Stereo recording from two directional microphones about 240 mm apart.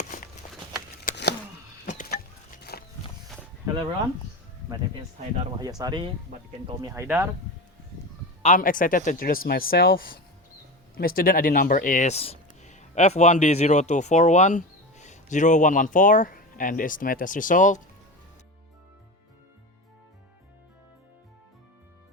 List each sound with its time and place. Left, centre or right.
1.0 s a sound: left
1.9 s livestock: left
5.6 s speech: centre
8.4 s speech: left